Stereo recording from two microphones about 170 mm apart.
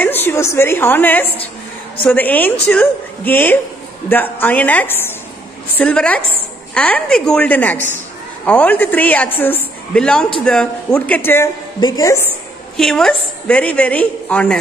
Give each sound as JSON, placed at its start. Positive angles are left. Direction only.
{"t": 0.0, "sound": "a woman's voice", "side_deg": 10}
{"t": 11.8, "sound": "a woman's voice", "side_deg": 25}
{"t": 12.7, "sound": "a woman's voice", "side_deg": 0}